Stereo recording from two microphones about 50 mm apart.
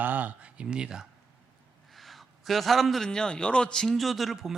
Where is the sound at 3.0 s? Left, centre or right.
Centre.